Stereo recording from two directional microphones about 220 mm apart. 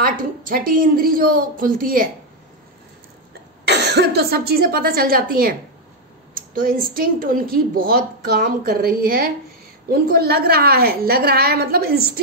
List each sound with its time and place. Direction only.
0.0 s speech: 40° right (ahead or behind)
3.6 s a woman's voice: 50° right (ahead or behind)